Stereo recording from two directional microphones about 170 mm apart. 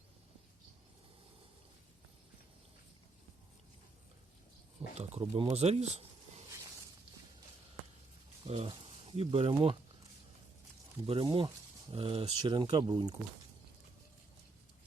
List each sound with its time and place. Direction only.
4.9 s speech: 40° right (ahead or behind)
8.4 s speech: 35° right (ahead or behind)
11.0 s speech: 30° right (ahead or behind)